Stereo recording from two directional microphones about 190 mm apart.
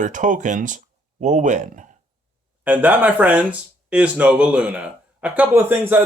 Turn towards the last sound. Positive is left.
turn(degrees=-10)  # may be behind; listen again after turning